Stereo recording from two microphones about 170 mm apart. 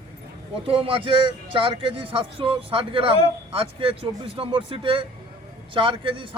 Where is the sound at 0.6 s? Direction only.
30° right (ahead or behind).